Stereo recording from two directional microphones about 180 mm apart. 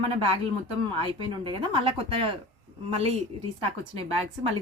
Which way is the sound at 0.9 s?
30° right (ahead or behind).